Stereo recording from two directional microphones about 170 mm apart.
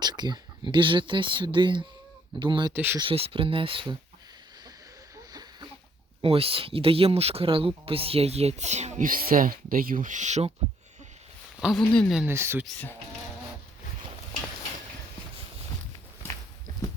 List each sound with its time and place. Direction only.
0.0 s speech: 25° right (ahead or behind)
2.7 s speech: 10° right (ahead or behind)
3.0 s speech: 35° right (ahead or behind)
5.3 s a sound: 25° right (ahead or behind)
6.2 s speech: 35° right (ahead or behind)
11.6 s speech: centre (ahead or behind)
12.2 s speech: 15° right (ahead or behind)
12.6 s speech: 10° left (ahead or behind)